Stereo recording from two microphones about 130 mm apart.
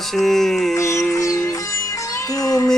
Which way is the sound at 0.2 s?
Centre (ahead or behind).